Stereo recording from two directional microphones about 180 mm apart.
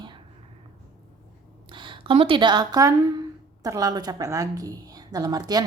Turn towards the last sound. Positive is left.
turn(degrees=-20)  # may be behind; listen again after turning